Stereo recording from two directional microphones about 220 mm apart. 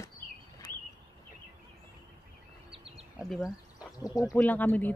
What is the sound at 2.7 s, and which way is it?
Bird, 25° right (ahead or behind).